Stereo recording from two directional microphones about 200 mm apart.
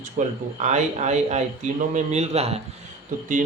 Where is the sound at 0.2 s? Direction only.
45° right (ahead or behind).